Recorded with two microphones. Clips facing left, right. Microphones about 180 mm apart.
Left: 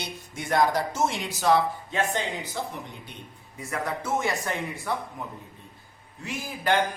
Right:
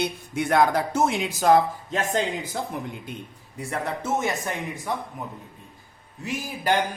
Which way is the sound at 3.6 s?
30° right (ahead or behind).